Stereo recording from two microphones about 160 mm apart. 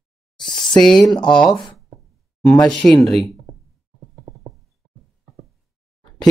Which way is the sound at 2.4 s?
5° left (ahead or behind).